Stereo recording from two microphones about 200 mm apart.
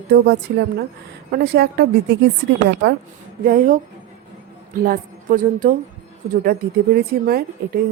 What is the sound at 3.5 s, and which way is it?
Speech, 45° right (ahead or behind).